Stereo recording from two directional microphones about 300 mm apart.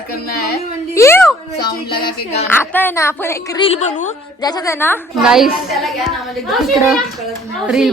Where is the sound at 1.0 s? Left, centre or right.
Centre.